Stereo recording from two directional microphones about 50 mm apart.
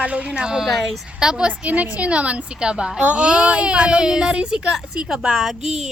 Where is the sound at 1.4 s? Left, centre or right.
Right.